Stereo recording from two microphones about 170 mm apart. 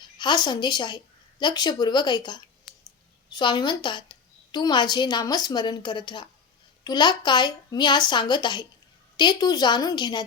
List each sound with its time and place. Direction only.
0.2 s a woman's voice: 25° left (ahead or behind)